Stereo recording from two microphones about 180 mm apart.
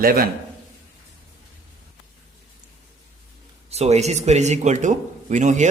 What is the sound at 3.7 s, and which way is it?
Speech, 35° right (ahead or behind).